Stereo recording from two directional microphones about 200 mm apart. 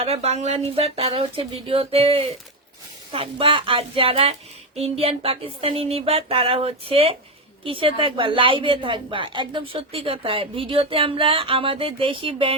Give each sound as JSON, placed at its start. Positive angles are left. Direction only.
{"t": 0.0, "sound": "a woman's voice", "side_deg": -30}